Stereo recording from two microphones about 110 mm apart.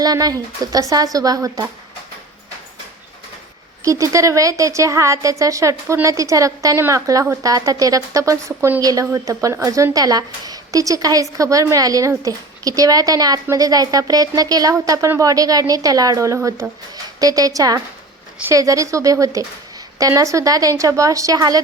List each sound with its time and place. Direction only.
0.0 s a woman's voice: 35° right (ahead or behind)
3.8 s a woman's voice: 30° right (ahead or behind)